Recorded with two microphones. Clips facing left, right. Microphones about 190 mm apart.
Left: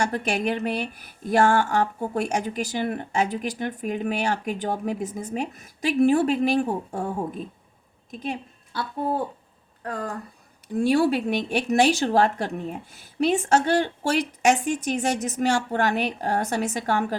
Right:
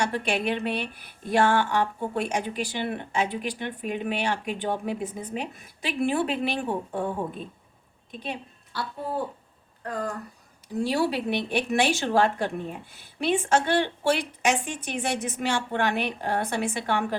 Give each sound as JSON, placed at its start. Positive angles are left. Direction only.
{"t": 0.0, "sound": "a woman's voice", "side_deg": 45}
{"t": 8.2, "sound": "a sound", "side_deg": 45}
{"t": 10.8, "sound": "a woman's voice", "side_deg": 50}